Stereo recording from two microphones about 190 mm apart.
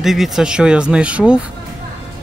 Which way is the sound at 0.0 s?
Centre (ahead or behind).